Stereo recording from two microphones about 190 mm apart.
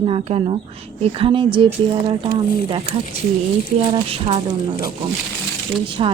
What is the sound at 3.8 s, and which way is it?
Speech, 30° right (ahead or behind).